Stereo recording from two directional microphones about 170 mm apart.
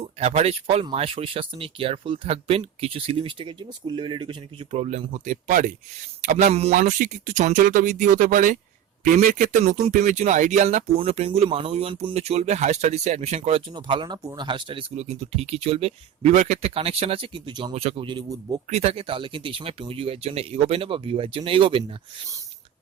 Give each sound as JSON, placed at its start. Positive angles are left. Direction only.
{"t": 0.0, "sound": "speech", "side_deg": -40}
{"t": 18.7, "sound": "speech", "side_deg": -35}